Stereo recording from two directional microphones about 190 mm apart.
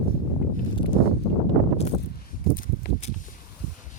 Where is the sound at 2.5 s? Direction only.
45° left (ahead or behind).